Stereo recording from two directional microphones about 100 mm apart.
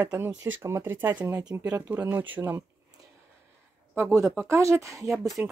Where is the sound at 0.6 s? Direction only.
25° right (ahead or behind).